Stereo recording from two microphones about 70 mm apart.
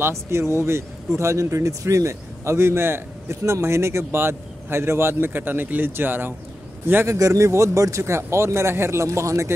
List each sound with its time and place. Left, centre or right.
0.0 s speech: right
7.1 s speech: right